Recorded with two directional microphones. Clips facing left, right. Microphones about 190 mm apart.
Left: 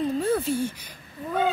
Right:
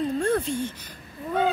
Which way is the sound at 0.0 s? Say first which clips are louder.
Even; 5° left (ahead or behind).